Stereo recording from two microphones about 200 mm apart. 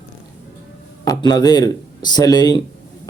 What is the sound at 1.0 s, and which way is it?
Speech, 20° left (ahead or behind).